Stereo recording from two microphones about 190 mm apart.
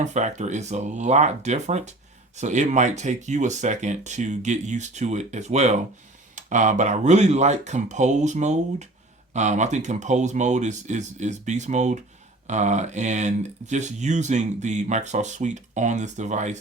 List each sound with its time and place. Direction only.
0.0 s speech: 40° right (ahead or behind)